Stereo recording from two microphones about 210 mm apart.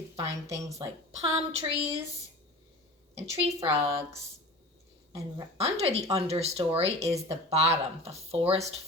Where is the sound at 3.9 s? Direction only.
15° right (ahead or behind).